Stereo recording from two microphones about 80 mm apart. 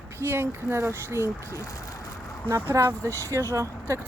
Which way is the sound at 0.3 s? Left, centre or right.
Right.